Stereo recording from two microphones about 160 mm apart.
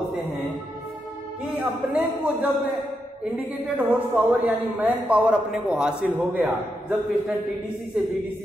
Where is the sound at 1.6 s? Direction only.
10° right (ahead or behind).